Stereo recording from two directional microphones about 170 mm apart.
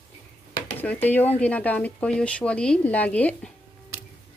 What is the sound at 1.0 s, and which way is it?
Speech, 10° left (ahead or behind).